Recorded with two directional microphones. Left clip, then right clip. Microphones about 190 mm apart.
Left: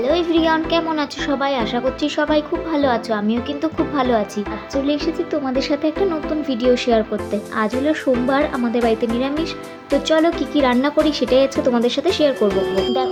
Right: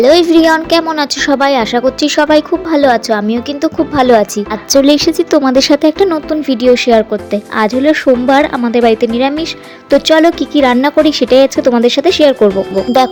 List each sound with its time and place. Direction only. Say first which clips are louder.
0.0 s a woman's voice: right 10 dB; 45° right (ahead or behind)
4.7 s a woman's voice: right 13 dB; 70° right (ahead or behind); by 12.5 s 35° right (ahead or behind)